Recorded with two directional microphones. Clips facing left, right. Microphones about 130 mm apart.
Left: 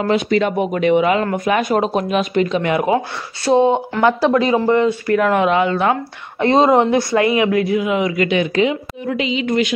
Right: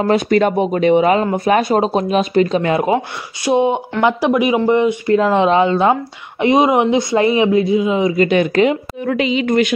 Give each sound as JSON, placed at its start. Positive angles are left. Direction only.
{"t": 0.0, "sound": "speech", "side_deg": -45}
{"t": 0.6, "sound": "speech", "side_deg": -30}
{"t": 3.4, "sound": "speech", "side_deg": -15}
{"t": 6.4, "sound": "speech", "side_deg": -15}
{"t": 8.3, "sound": "a woman's voice", "side_deg": -45}